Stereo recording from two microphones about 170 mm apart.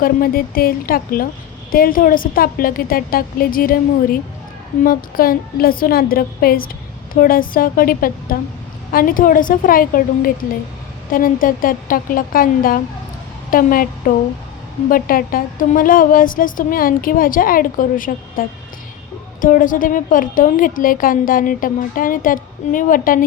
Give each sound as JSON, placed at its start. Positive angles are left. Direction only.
{"t": 0.0, "sound": "a woman's voice", "side_deg": 60}